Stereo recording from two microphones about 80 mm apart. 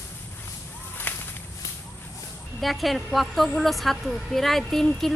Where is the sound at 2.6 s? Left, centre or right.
Centre.